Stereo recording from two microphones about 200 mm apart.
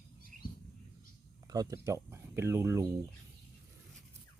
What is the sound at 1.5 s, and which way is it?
Speech, 20° right (ahead or behind).